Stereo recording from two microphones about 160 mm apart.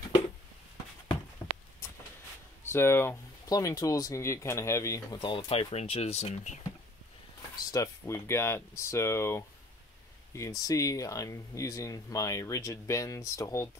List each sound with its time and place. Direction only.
1.4 s a sound: 15° left (ahead or behind)
2.7 s speech: 15° left (ahead or behind); by 6.6 s 45° left (ahead or behind)
7.5 s speech: 20° left (ahead or behind)